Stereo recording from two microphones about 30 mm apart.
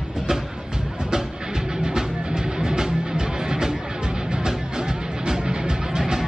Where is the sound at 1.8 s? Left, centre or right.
Right.